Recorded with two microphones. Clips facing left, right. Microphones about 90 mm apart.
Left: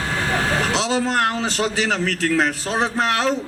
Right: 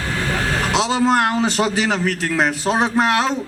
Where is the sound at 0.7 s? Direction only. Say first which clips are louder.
Right 4 dB; 20° right (ahead or behind).